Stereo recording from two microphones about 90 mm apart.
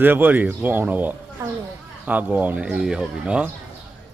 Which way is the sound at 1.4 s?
45° right (ahead or behind).